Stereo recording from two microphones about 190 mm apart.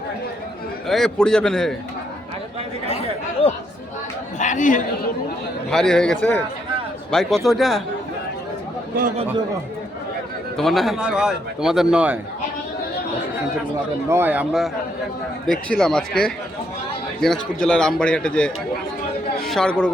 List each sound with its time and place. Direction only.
0.9 s speech: centre (ahead or behind)
4.4 s a man's voice: 40° left (ahead or behind)
5.7 s speech: 5° left (ahead or behind)
10.6 s speech: centre (ahead or behind)
14.1 s speech: 10° right (ahead or behind)